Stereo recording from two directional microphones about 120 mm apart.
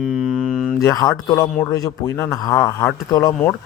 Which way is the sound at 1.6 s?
30° left (ahead or behind).